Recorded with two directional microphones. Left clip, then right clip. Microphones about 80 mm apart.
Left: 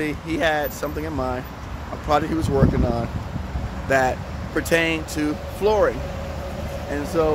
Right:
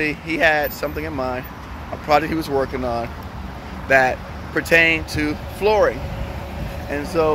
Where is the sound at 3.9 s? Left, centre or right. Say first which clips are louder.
Right 4 dB; left.